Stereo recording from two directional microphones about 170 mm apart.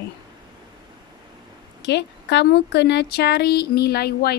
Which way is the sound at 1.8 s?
90° left.